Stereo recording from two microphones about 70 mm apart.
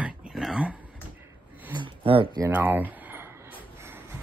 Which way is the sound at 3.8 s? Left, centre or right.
Right.